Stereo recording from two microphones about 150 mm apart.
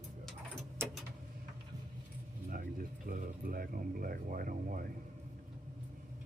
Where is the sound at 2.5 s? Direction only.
70° right (ahead or behind).